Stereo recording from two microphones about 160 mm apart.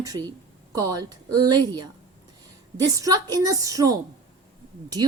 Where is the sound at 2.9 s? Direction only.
20° right (ahead or behind).